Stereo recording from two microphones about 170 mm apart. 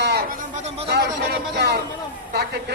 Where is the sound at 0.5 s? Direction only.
40° right (ahead or behind).